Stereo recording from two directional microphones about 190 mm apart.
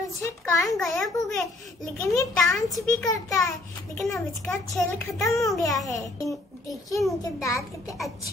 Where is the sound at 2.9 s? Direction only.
15° left (ahead or behind).